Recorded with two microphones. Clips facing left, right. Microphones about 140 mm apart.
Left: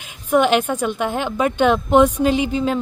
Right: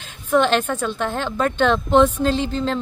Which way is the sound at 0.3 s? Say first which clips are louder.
Left 2 dB; 10° left (ahead or behind).